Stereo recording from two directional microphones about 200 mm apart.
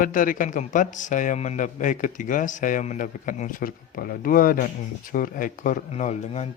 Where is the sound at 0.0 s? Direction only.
40° left (ahead or behind).